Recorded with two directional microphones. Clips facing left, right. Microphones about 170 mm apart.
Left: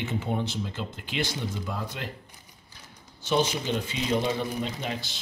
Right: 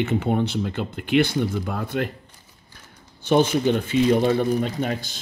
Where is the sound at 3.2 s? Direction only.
55° right (ahead or behind).